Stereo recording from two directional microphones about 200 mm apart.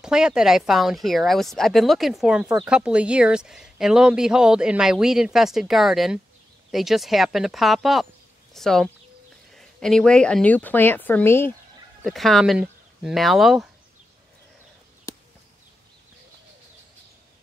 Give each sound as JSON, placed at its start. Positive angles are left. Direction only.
{"t": 0.0, "sound": "speech", "side_deg": -5}
{"t": 12.0, "sound": "speech", "side_deg": 0}
{"t": 15.1, "sound": "a sound", "side_deg": 15}